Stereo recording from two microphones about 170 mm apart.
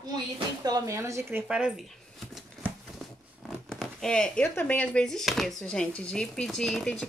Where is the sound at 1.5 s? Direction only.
5° right (ahead or behind).